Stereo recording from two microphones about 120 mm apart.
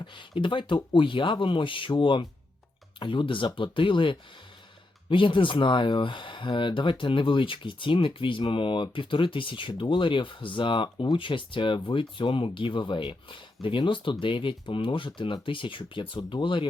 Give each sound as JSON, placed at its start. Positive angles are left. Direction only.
{"t": 0.0, "sound": "speech", "side_deg": 40}